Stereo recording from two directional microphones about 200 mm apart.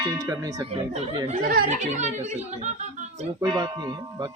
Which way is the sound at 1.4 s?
50° right (ahead or behind).